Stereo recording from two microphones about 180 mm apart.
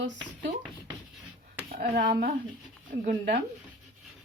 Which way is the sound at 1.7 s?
55° right (ahead or behind).